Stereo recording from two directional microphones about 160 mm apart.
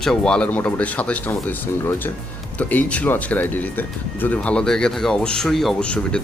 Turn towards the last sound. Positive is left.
turn(degrees=5)  # may be behind; listen again after turning